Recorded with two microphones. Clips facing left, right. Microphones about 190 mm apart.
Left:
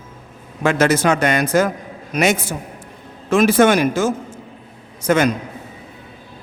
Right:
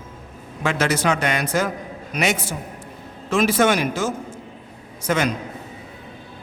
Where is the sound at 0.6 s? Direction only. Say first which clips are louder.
Left 5 dB; 45° left (ahead or behind).